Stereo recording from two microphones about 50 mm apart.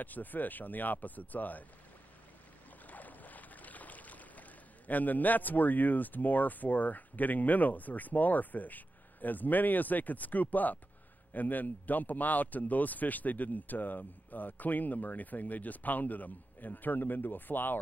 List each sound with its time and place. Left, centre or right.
0.0 s a man's voice: left
2.9 s a man's voice: left